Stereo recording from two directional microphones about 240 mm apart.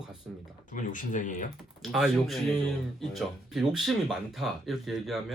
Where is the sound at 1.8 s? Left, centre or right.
Centre.